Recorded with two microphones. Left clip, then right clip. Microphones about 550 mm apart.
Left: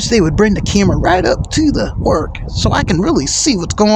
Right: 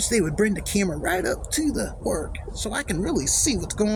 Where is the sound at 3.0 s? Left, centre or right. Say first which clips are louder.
Left 10 dB; centre.